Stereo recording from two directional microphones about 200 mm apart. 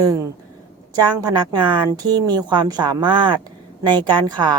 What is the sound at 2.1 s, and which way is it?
A woman's voice, 20° right (ahead or behind).